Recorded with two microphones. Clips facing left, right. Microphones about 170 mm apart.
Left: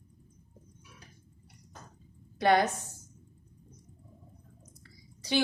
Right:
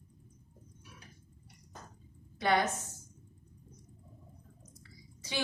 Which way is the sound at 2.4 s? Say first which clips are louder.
Left 5 dB; 35° left (ahead or behind).